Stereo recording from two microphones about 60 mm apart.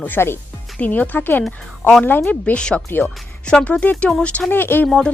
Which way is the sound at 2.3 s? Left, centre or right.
Centre.